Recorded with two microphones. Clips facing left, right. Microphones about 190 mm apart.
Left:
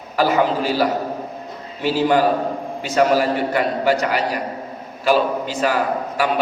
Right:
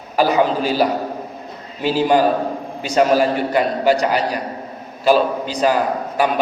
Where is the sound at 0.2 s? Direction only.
15° right (ahead or behind).